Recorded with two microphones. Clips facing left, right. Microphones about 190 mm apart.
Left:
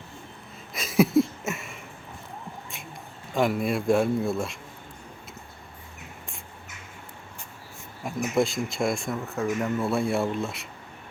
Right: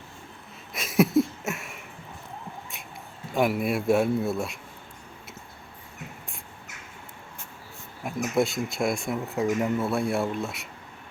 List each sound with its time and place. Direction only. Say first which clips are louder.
0.7 s a sound: left 1 dB; centre (ahead or behind)
3.3 s speech: even; 5° right (ahead or behind)
8.0 s a sound: even; 5° right (ahead or behind)
8.4 s speech: even; centre (ahead or behind)
9.3 s speech: right 2 dB; 15° right (ahead or behind)
9.7 s speech: left 1 dB; centre (ahead or behind)